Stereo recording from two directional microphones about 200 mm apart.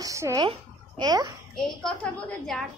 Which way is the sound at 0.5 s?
20° right (ahead or behind).